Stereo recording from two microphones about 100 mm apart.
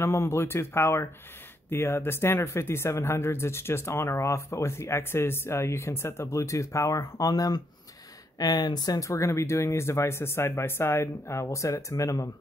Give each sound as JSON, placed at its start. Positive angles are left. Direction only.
{"t": 0.0, "sound": "speech", "side_deg": 25}